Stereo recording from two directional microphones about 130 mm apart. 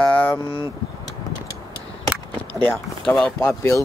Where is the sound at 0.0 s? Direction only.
10° left (ahead or behind).